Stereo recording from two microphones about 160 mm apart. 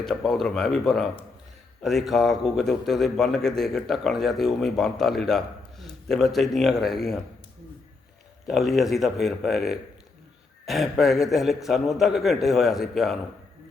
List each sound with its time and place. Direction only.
0.0 s a man's voice: 5° left (ahead or behind)
8.4 s a man's voice: centre (ahead or behind)